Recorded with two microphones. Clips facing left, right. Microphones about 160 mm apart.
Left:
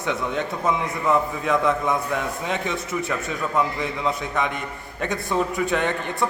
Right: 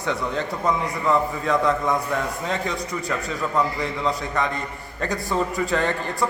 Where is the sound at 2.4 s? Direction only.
15° left (ahead or behind).